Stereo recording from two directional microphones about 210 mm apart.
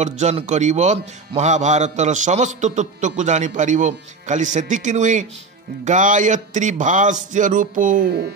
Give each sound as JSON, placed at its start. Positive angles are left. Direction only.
{"t": 0.0, "sound": "a man's voice", "side_deg": -35}